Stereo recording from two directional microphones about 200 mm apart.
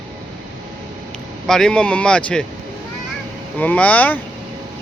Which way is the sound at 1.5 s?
5° left (ahead or behind).